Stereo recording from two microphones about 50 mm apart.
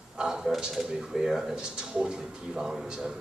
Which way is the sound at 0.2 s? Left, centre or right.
Centre.